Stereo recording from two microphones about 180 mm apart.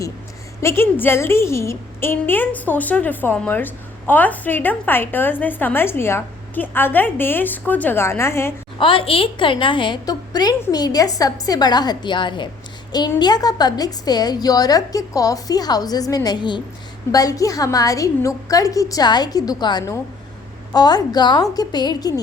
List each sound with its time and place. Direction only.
0.6 s a woman's voice: 15° left (ahead or behind)
8.8 s a woman's voice: 30° left (ahead or behind)